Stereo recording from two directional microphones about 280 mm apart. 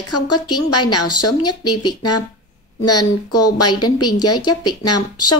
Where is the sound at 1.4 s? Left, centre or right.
Centre.